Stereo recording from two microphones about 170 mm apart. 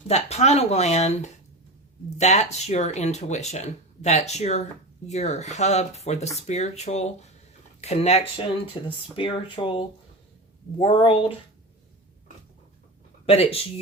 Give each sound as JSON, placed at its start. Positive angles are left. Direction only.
{"t": 0.1, "sound": "speech", "side_deg": 40}
{"t": 13.2, "sound": "speech", "side_deg": 35}